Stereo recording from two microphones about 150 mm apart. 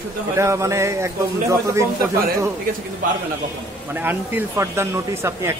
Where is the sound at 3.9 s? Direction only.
15° right (ahead or behind).